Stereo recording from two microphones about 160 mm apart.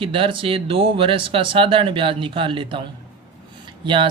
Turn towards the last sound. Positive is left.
turn(degrees=-30)  # may be behind; listen again after turning